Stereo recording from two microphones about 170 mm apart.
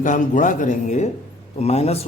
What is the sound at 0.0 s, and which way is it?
Speech, 50° left (ahead or behind).